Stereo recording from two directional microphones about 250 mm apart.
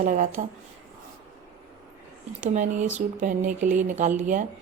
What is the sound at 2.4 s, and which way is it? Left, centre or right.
Speech, right.